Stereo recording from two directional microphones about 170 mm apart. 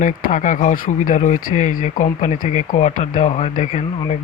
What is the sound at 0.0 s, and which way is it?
Speech, 50° left (ahead or behind).